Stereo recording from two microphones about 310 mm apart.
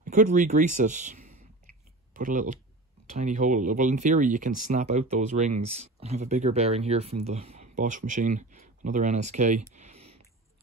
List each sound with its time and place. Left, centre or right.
0.0 s speech: right
1.2 s a sound: right
2.1 s speech: right